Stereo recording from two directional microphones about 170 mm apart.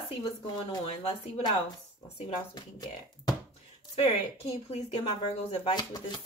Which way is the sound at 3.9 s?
35° left (ahead or behind).